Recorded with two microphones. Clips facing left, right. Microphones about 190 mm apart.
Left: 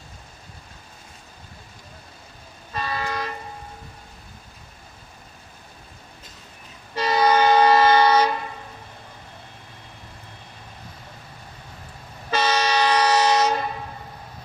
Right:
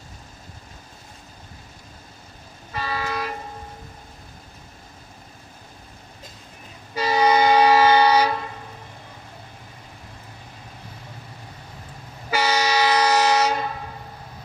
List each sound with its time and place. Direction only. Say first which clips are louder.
2.7 s vehicle: even; 10° right (ahead or behind)
6.9 s train: even; 10° right (ahead or behind)
12.3 s train: even; 10° right (ahead or behind)